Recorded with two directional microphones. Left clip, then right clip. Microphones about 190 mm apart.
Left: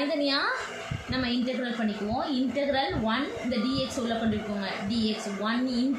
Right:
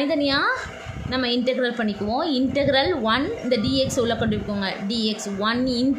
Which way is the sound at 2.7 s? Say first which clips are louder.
Right 9 dB; 55° right (ahead or behind).